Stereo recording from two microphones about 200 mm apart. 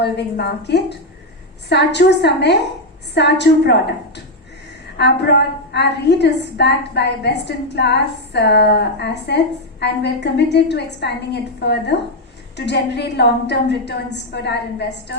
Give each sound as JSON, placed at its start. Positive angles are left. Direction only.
{"t": 0.0, "sound": "a woman's voice", "side_deg": 55}